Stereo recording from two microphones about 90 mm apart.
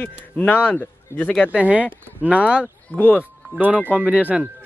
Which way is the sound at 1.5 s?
15° right (ahead or behind).